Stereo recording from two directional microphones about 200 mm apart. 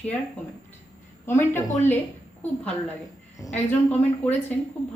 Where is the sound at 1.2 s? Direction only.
10° left (ahead or behind).